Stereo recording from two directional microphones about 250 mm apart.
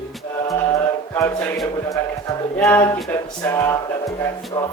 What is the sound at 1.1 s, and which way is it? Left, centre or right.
Speech, centre.